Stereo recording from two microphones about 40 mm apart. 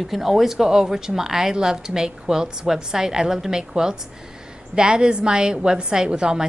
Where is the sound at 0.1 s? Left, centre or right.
Centre.